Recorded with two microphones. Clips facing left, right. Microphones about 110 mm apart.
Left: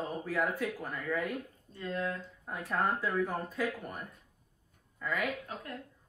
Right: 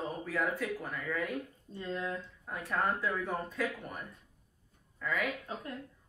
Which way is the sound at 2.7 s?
Centre (ahead or behind).